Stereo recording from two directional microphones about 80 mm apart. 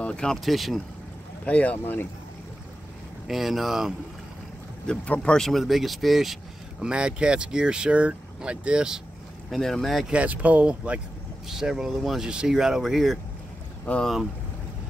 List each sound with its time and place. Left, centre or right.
0.0 s speech: centre
0.5 s speech: centre
1.4 s speech: centre
3.3 s speech: centre
4.8 s speech: centre
6.8 s speech: centre
9.5 s speech: centre
10.1 s speech: centre
13.9 s speech: centre